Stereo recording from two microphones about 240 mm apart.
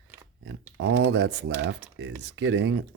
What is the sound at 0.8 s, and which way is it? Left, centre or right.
Speech, right.